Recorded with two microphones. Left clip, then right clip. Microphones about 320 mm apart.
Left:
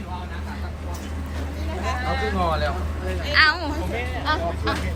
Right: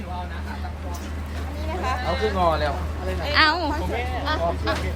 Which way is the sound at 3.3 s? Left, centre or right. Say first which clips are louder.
Left 1 dB; centre.